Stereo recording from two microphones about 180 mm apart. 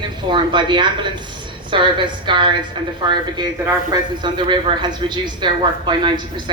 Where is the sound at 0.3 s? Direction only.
25° right (ahead or behind).